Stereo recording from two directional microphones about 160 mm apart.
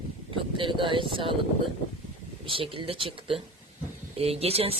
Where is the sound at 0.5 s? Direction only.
30° right (ahead or behind).